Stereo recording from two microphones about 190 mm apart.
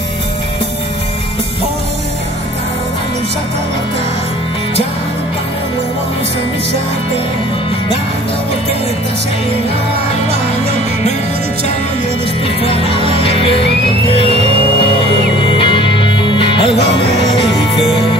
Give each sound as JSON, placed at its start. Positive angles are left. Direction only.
{"t": 12.6, "sound": "music", "side_deg": 30}
{"t": 15.4, "sound": "music", "side_deg": 25}